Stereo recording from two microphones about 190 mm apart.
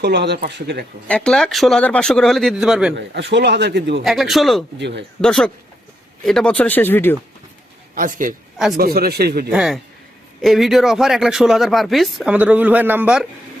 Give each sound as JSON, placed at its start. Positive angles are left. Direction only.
{"t": 0.0, "sound": "a man's voice", "side_deg": -60}
{"t": 1.0, "sound": "speech", "side_deg": 5}
{"t": 2.9, "sound": "a man's voice", "side_deg": -65}
{"t": 4.0, "sound": "speech", "side_deg": 0}
{"t": 4.8, "sound": "a man's voice", "side_deg": -65}
{"t": 5.2, "sound": "speech", "side_deg": 0}
{"t": 7.9, "sound": "a man's voice", "side_deg": -45}
{"t": 9.5, "sound": "speech", "side_deg": -5}